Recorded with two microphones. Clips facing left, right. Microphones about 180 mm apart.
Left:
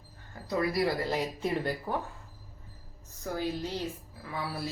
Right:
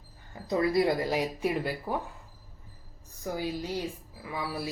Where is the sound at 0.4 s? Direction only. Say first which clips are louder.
Right 3 dB; 25° right (ahead or behind).